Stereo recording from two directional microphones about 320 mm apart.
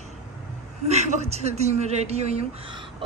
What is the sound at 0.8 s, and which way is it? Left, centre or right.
Speech, right.